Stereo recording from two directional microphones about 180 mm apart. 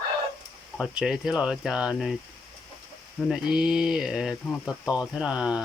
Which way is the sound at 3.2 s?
Centre (ahead or behind).